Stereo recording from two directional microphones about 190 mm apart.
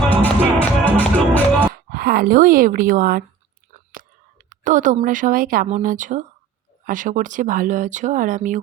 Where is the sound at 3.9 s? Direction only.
50° right (ahead or behind).